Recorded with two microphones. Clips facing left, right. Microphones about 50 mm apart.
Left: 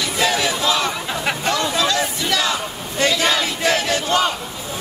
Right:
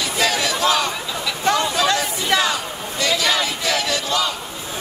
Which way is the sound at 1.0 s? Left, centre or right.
Left.